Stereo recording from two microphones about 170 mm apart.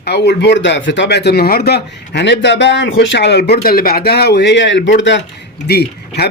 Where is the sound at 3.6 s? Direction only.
60° left (ahead or behind); by 5.2 s 90° left.